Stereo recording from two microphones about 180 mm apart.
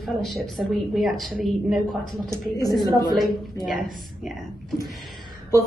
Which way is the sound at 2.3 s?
20° left (ahead or behind).